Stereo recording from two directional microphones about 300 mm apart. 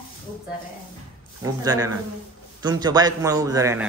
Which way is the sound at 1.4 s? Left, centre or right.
Centre.